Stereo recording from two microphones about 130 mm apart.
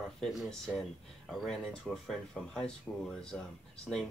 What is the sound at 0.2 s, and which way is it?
Speech, centre (ahead or behind).